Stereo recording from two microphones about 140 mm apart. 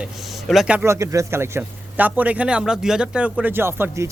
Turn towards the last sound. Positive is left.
turn(degrees=-20)  # may be behind; listen again after turning